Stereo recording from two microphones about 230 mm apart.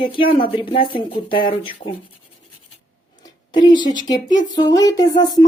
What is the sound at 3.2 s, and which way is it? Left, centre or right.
Speech, centre.